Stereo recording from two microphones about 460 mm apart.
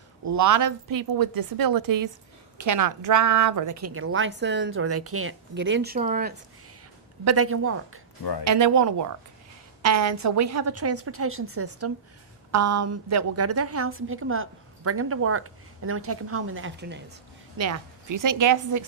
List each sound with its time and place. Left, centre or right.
0.3 s a woman's voice: right; by 6.3 s centre
7.3 s a woman's voice: right
8.2 s speech: left
8.4 s a woman's voice: right
17.6 s a woman's voice: right